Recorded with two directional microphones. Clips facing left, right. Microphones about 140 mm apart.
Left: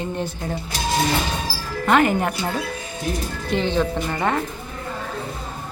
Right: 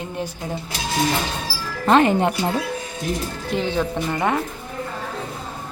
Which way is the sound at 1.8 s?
30° right (ahead or behind).